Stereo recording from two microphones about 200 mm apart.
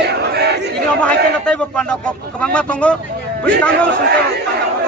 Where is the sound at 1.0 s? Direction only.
5° left (ahead or behind).